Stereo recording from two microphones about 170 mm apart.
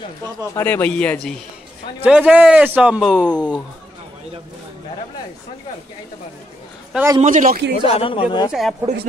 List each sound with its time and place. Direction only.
0.6 s a man's voice: 10° left (ahead or behind)
2.0 s speech: 5° right (ahead or behind)
7.2 s a man's voice: 50° right (ahead or behind)
7.8 s speech: 30° left (ahead or behind)
8.5 s speech: centre (ahead or behind)